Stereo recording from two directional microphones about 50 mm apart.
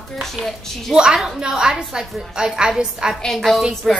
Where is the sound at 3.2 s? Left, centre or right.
Centre.